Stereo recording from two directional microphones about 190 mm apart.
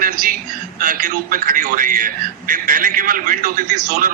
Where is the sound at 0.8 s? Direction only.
45° right (ahead or behind).